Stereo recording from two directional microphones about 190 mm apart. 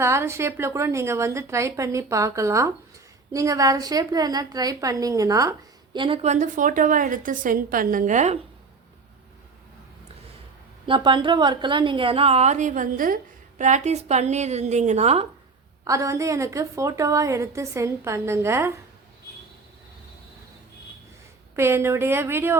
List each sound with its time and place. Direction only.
0.0 s a woman's voice: 15° right (ahead or behind); by 8.4 s 40° right (ahead or behind)
10.8 s a woman's voice: 25° right (ahead or behind)
15.8 s a woman's voice: 15° right (ahead or behind)
21.5 s a woman's voice: 15° right (ahead or behind)